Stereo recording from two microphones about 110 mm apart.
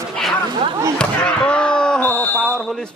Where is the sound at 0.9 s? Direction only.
10° left (ahead or behind).